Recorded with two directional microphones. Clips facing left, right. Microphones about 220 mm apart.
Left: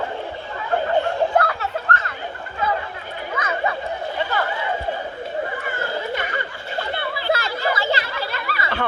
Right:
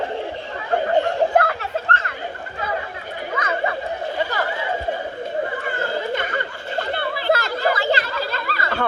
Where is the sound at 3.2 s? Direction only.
35° right (ahead or behind).